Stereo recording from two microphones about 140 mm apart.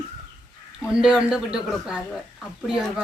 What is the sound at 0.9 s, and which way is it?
Speech, 5° right (ahead or behind).